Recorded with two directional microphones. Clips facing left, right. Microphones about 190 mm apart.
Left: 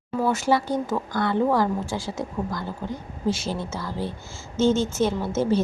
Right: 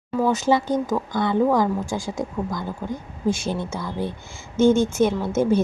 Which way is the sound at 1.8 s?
45° right (ahead or behind).